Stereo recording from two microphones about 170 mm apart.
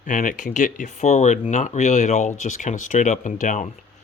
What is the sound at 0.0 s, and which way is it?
Speech, 50° left (ahead or behind).